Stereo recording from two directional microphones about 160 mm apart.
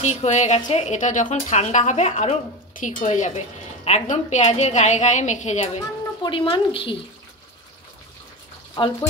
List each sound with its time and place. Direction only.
0.0 s a woman's voice: 45° left (ahead or behind)
6.2 s a woman's voice: 30° left (ahead or behind)
8.8 s speech: 30° left (ahead or behind)